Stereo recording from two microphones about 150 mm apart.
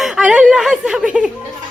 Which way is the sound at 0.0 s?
Centre (ahead or behind).